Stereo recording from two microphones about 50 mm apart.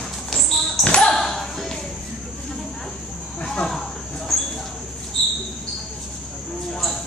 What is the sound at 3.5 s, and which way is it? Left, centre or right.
Snake, centre.